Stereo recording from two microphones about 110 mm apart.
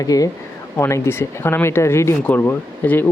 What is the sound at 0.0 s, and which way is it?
Speech, 30° left (ahead or behind).